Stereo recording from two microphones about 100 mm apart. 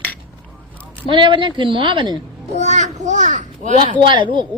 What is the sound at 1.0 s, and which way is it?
A woman's voice, 55° right (ahead or behind).